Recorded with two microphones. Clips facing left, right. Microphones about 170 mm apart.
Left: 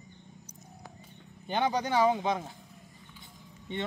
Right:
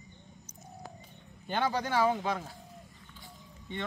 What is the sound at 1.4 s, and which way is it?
Speech, 15° left (ahead or behind).